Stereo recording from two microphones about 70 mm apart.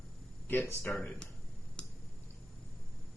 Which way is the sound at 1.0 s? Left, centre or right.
Centre.